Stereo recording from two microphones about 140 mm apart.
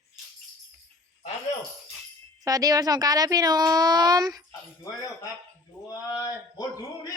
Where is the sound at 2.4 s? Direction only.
25° right (ahead or behind).